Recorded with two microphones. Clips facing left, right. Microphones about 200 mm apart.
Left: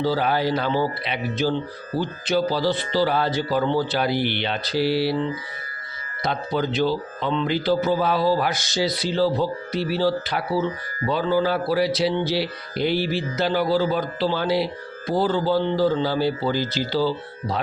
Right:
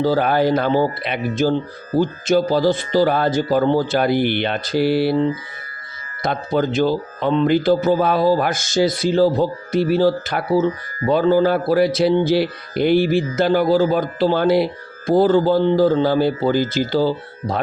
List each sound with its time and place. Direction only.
0.0 s a man's voice: 50° right (ahead or behind)